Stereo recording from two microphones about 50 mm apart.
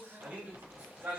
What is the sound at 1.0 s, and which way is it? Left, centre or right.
Speech, right.